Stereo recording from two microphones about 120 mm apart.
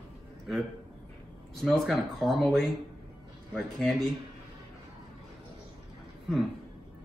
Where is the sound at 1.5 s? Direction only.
Centre (ahead or behind).